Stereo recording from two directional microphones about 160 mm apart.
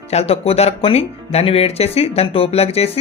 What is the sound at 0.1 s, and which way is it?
Speech, 40° left (ahead or behind).